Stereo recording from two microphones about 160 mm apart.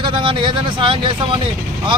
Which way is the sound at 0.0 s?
30° right (ahead or behind).